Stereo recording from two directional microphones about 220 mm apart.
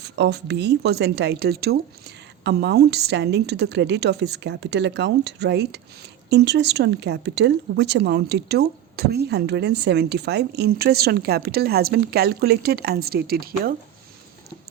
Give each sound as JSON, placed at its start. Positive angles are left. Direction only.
{"t": 0.0, "sound": "speech", "side_deg": -50}